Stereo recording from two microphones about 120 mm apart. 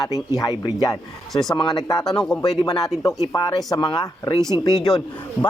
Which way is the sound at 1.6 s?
35° left (ahead or behind).